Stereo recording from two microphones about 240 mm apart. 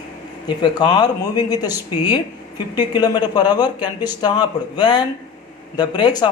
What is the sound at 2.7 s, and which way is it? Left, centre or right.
Speech, centre.